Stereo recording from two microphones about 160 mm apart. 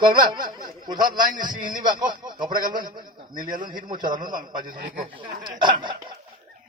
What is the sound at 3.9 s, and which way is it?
A man's voice, 25° right (ahead or behind).